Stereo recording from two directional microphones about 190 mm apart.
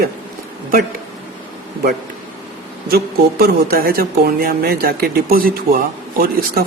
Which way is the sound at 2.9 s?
55° right (ahead or behind).